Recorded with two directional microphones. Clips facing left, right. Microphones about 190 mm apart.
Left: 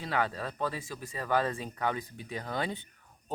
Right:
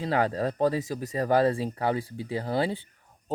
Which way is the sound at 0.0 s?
35° right (ahead or behind).